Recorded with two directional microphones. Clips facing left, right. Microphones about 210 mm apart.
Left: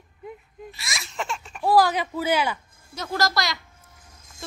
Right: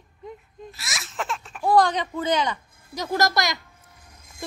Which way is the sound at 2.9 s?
15° right (ahead or behind).